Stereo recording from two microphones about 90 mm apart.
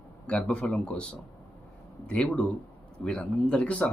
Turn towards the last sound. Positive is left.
turn(degrees=15)  # may be behind; listen again after turning